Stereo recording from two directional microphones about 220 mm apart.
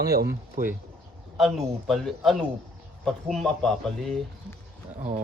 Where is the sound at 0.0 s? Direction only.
45° right (ahead or behind).